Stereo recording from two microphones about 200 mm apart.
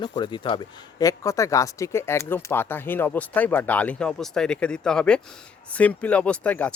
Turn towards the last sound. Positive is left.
turn(degrees=5)  # may be behind; listen again after turning